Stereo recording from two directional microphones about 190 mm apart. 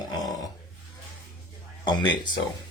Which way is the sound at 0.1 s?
20° left (ahead or behind).